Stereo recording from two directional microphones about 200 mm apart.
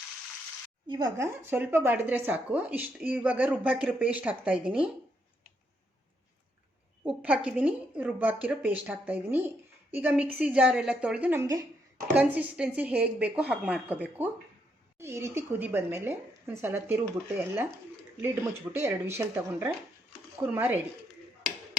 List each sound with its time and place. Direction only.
0.9 s speech: 20° right (ahead or behind); by 4.9 s 5° right (ahead or behind)
7.0 s speech: 5° right (ahead or behind)
18.8 s speech: 10° right (ahead or behind)